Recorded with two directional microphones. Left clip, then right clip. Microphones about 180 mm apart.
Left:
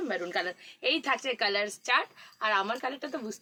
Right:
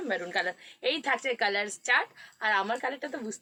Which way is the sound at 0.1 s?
15° left (ahead or behind).